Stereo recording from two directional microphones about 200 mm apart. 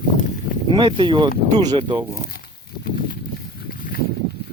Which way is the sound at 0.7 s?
20° right (ahead or behind).